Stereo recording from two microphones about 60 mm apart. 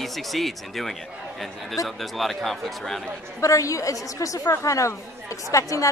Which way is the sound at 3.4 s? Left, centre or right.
Left.